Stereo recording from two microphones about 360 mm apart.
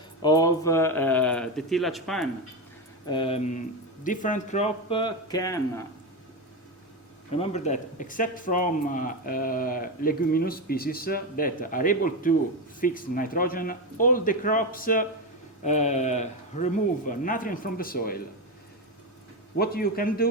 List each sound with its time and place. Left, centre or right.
0.2 s speech: centre
3.1 s speech: centre
7.3 s speech: centre
19.5 s speech: left